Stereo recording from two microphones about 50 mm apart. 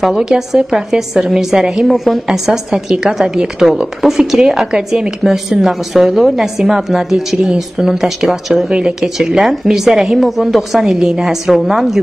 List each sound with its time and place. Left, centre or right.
0.0 s a woman's voice: centre
8.6 s speech: centre
9.0 s a woman's voice: centre